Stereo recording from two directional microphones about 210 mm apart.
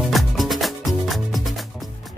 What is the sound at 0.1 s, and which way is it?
Music, centre (ahead or behind).